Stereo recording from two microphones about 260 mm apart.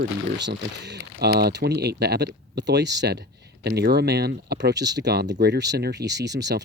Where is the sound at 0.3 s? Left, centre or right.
Right.